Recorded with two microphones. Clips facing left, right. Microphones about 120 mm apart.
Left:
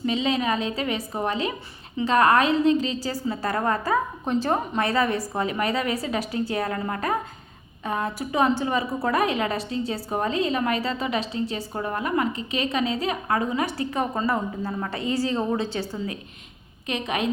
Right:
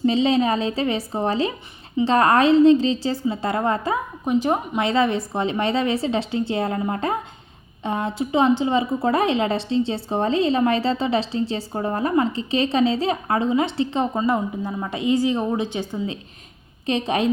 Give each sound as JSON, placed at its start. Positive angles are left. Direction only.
{"t": 0.0, "sound": "a woman's voice", "side_deg": -30}
{"t": 16.8, "sound": "a woman's voice", "side_deg": -30}